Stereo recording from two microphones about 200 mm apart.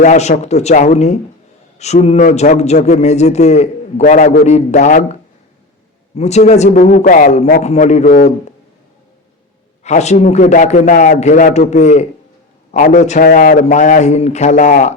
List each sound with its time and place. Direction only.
0.0 s a man's voice: 35° left (ahead or behind)
6.1 s a man's voice: 35° left (ahead or behind)
9.8 s a man's voice: 35° left (ahead or behind)